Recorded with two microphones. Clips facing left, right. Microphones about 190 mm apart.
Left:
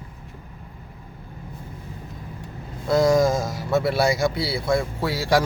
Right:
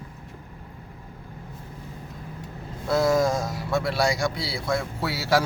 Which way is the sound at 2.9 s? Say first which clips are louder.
Left 3 dB; centre (ahead or behind).